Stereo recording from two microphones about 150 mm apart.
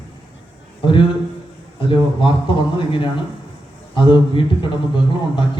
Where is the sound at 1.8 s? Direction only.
35° left (ahead or behind).